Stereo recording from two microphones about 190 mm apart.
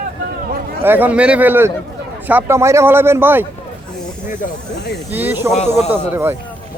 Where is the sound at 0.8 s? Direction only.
10° right (ahead or behind).